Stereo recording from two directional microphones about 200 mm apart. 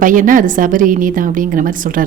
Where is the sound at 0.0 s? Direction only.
40° right (ahead or behind).